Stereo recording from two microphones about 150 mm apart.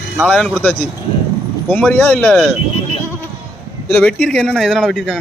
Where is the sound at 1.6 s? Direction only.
10° left (ahead or behind).